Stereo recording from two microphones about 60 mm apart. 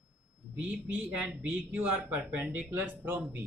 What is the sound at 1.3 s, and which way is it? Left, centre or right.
Speech, right.